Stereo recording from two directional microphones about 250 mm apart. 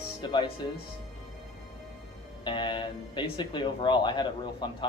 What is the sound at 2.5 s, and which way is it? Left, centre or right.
Speech, centre.